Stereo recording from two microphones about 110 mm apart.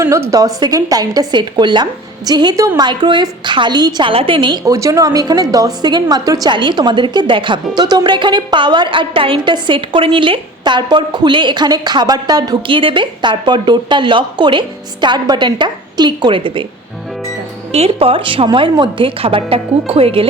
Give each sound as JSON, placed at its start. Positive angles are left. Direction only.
{"t": 0.0, "sound": "a woman's voice", "side_deg": -25}
{"t": 4.1, "sound": "a woman's voice", "side_deg": -55}
{"t": 4.6, "sound": "a woman's voice", "side_deg": -30}
{"t": 17.7, "sound": "speech", "side_deg": -65}